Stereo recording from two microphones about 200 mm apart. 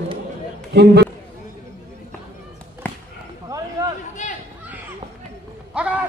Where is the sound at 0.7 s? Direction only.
55° right (ahead or behind).